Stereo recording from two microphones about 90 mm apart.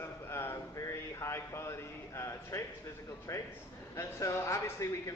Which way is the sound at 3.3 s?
35° left (ahead or behind).